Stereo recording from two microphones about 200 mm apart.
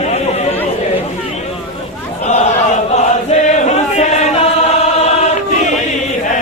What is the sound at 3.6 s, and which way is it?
Chant, 35° left (ahead or behind).